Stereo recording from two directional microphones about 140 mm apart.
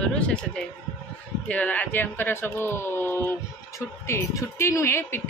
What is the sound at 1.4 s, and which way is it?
Speech, 10° left (ahead or behind).